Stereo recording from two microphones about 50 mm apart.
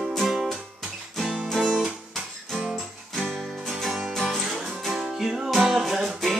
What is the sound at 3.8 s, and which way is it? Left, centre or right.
Music, centre.